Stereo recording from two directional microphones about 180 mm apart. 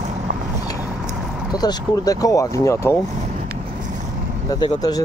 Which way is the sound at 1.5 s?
20° left (ahead or behind).